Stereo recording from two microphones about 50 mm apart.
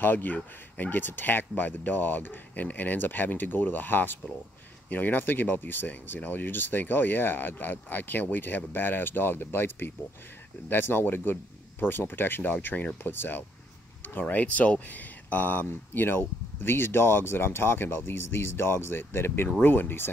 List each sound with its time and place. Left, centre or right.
0.0 s speech: left